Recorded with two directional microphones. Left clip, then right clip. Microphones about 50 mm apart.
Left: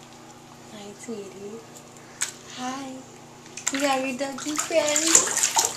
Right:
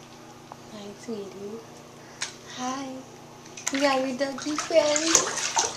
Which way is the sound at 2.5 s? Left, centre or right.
Right.